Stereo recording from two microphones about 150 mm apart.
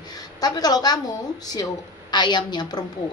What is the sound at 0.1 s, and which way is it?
A woman's voice, 25° left (ahead or behind).